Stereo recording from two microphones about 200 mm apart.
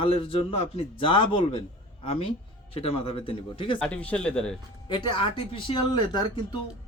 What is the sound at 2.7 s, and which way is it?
Speech, 30° left (ahead or behind).